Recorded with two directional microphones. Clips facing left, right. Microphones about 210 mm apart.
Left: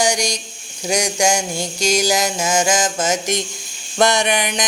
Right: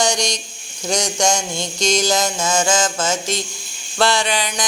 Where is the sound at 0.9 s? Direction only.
10° left (ahead or behind).